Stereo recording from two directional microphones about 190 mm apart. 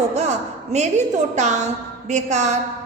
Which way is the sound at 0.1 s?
35° right (ahead or behind).